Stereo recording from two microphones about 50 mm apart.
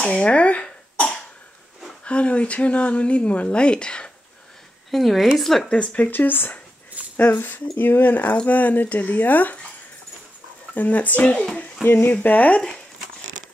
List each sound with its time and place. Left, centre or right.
0.0 s cough: left
2.0 s speech: left
4.9 s a woman's voice: centre
5.7 s speech: left
6.0 s speech: left
10.7 s speech: left
11.5 s a sound: left
12.1 s speech: left
12.5 s speech: left